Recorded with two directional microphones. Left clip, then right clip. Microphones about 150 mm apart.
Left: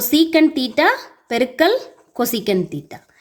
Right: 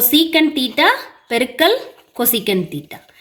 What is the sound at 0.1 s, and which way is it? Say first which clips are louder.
A woman's voice: even; 35° left (ahead or behind).